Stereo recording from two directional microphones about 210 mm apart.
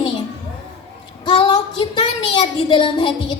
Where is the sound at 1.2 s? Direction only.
20° left (ahead or behind).